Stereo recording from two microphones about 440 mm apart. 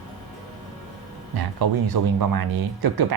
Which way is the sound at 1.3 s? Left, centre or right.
Right.